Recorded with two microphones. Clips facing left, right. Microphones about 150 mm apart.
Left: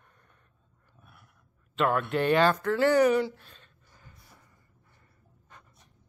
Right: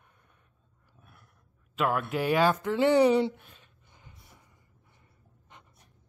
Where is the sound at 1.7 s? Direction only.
5° right (ahead or behind); by 3.4 s 25° right (ahead or behind).